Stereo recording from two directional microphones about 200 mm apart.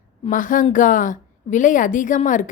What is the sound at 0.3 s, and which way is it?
A woman's voice, 40° left (ahead or behind).